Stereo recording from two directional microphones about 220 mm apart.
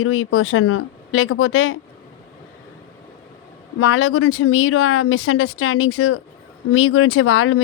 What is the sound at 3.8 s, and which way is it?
A woman's voice, 65° left (ahead or behind).